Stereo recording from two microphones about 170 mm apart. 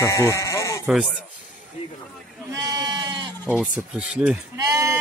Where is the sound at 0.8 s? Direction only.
5° right (ahead or behind).